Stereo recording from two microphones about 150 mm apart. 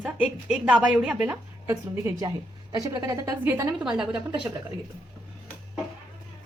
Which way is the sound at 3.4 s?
10° right (ahead or behind).